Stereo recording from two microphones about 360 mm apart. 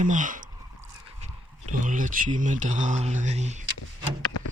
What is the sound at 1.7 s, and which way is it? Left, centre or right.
Speech, right.